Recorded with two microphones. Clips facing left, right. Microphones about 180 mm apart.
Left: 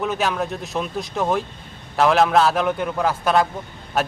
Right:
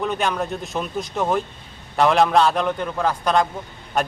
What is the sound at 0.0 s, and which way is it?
A man's voice, centre (ahead or behind).